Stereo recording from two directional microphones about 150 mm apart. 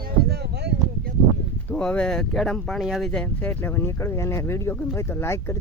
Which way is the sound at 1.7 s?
10° left (ahead or behind).